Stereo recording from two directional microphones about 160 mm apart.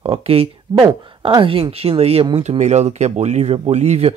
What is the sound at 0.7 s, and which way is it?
Speech, 25° right (ahead or behind).